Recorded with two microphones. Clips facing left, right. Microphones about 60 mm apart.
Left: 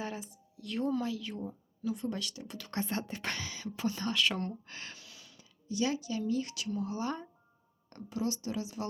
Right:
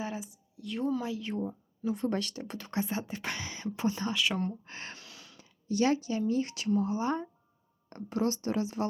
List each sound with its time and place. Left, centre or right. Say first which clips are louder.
0.0 s speech: right 2 dB; centre
1.0 s speech: right 3 dB; right
2.0 s speech: right 5 dB; right
2.7 s speech: right 2 dB; centre
3.4 s speech: right 3 dB; right
4.1 s speech: right 1 dB; centre
4.6 s speech: right 3 dB; right
4.9 s speech: right 3 dB; right
8.1 s speech: right 5 dB; right